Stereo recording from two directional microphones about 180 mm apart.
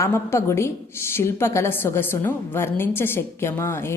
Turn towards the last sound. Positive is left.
turn(degrees=15)  # may be behind; listen again after turning